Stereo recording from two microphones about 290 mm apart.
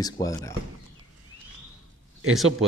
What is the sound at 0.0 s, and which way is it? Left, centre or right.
Speech, centre.